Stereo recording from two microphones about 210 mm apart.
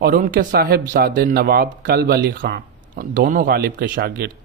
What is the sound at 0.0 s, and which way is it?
Speech, 40° right (ahead or behind).